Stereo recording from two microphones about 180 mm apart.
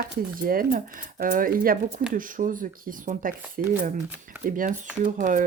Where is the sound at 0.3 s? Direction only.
50° right (ahead or behind).